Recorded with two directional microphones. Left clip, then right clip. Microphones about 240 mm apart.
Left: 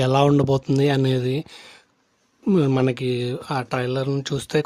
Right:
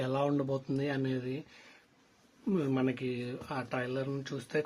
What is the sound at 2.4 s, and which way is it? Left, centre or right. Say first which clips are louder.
Speech: left 12 dB; left.